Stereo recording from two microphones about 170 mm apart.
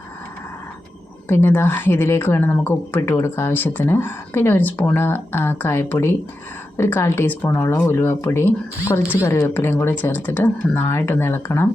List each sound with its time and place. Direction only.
1.3 s speech: 10° left (ahead or behind)